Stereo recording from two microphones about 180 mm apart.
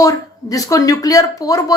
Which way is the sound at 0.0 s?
20° left (ahead or behind).